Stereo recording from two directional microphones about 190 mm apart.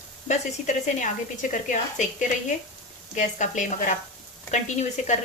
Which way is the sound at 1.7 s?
40° left (ahead or behind).